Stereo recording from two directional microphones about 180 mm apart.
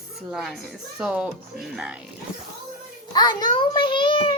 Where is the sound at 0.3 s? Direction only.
Centre (ahead or behind).